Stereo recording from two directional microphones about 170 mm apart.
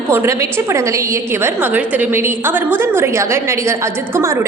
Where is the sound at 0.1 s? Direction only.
15° right (ahead or behind).